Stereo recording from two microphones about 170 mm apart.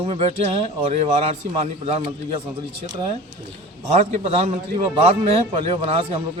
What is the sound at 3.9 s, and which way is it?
Speech, 40° right (ahead or behind).